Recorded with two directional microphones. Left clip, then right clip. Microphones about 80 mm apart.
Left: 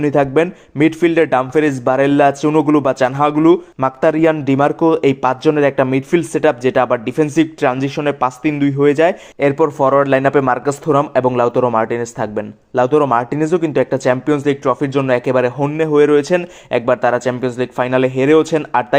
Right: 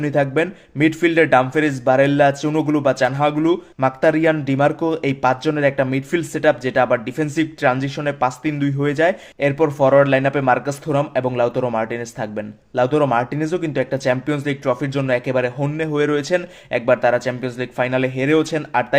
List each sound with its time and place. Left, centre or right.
0.0 s a man's voice: left